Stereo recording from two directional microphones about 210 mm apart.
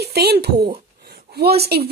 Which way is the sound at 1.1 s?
50° right (ahead or behind).